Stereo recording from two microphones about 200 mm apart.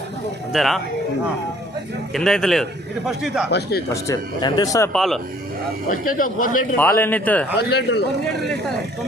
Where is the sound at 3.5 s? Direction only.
55° left (ahead or behind).